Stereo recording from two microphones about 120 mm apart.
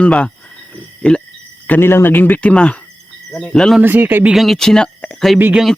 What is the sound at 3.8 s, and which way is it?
Speech, 15° right (ahead or behind).